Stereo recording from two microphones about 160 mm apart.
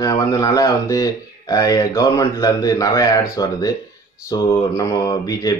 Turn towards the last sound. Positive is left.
turn(degrees=25)  # may be behind; listen again after turning